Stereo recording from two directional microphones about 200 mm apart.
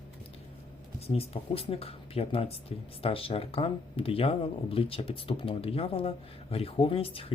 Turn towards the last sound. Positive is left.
turn(degrees=30)  # may be behind; listen again after turning